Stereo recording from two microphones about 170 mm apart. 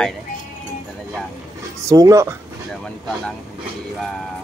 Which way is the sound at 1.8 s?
20° right (ahead or behind).